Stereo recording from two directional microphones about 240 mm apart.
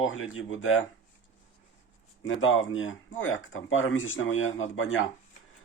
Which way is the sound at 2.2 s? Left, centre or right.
Left.